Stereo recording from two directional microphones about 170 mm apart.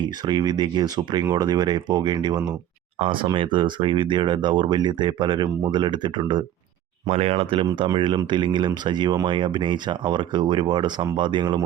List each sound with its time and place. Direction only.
0.0 s speech: 25° right (ahead or behind)